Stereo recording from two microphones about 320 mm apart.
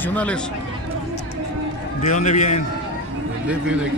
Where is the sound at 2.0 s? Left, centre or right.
Left.